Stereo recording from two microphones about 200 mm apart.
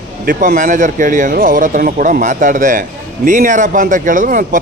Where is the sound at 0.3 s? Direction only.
40° right (ahead or behind).